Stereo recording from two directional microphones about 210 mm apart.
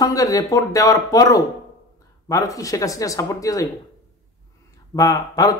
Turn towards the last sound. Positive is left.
turn(degrees=15)  # may be behind; listen again after turning